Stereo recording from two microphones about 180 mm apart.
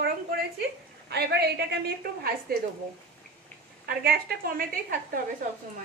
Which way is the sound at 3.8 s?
60° right (ahead or behind).